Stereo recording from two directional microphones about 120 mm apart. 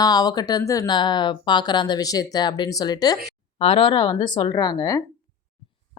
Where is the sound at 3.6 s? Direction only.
45° left (ahead or behind).